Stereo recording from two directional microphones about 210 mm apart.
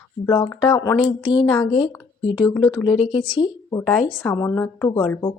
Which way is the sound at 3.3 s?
20° left (ahead or behind).